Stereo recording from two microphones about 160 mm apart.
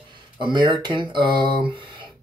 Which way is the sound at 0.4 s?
30° right (ahead or behind).